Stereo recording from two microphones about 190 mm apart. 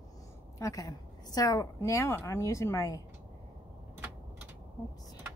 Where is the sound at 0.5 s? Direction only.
15° left (ahead or behind).